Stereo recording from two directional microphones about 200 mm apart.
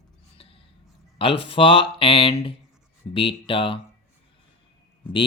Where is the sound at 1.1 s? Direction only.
25° left (ahead or behind).